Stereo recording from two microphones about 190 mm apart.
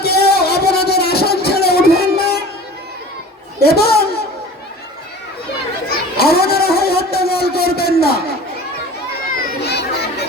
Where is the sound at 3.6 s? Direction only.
55° left (ahead or behind).